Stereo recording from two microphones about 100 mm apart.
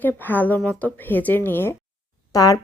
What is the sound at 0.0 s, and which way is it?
A woman's voice, 20° left (ahead or behind).